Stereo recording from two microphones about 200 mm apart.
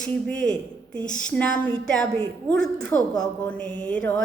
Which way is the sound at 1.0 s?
40° left (ahead or behind).